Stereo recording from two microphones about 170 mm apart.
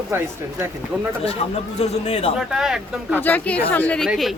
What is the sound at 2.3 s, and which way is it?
Speech, 5° right (ahead or behind).